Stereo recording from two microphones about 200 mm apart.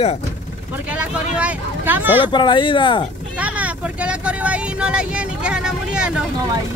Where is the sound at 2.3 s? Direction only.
25° left (ahead or behind).